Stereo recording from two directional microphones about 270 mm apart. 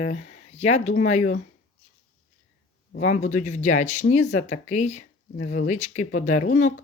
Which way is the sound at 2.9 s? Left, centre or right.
Left.